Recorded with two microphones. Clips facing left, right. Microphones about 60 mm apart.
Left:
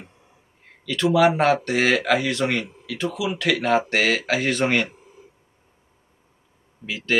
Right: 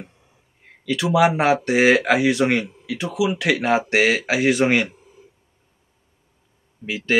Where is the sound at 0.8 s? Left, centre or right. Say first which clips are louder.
Even; centre.